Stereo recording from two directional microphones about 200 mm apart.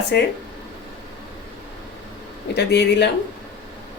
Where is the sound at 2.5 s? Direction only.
55° left (ahead or behind).